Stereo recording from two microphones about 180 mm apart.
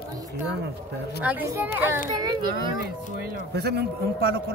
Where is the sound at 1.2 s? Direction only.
10° right (ahead or behind).